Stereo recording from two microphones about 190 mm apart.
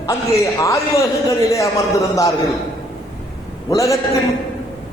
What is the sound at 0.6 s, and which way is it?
A man's voice, 15° left (ahead or behind).